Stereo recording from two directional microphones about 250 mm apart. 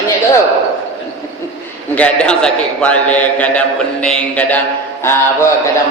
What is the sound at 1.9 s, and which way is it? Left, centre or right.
A man's voice, centre.